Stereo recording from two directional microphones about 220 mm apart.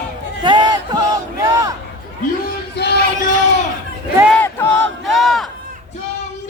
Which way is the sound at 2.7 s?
50° left (ahead or behind).